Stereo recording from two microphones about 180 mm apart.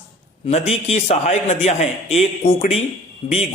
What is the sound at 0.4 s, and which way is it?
A man's voice, 35° left (ahead or behind).